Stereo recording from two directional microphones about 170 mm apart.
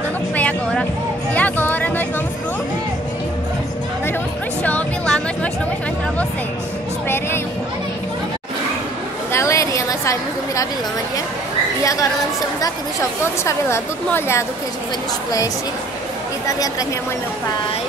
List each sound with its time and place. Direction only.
0.4 s vehicle: 10° left (ahead or behind)
1.3 s music: 10° left (ahead or behind)
4.6 s music: 5° left (ahead or behind)
7.1 s speech: 15° left (ahead or behind)
9.3 s a sound: 15° left (ahead or behind)
11.8 s speech: 20° left (ahead or behind)
13.4 s speech: 15° left (ahead or behind)
16.4 s a woman's voice: 20° left (ahead or behind)